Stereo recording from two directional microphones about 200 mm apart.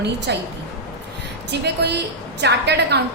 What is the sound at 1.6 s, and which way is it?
A woman's voice, 55° right (ahead or behind).